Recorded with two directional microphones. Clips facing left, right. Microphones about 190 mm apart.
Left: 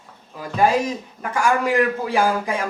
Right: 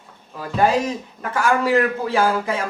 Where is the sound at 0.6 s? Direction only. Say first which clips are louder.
Even; 10° left (ahead or behind).